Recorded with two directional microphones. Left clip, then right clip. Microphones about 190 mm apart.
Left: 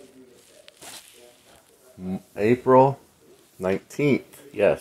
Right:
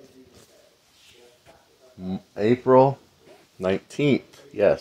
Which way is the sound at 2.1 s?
5° right (ahead or behind).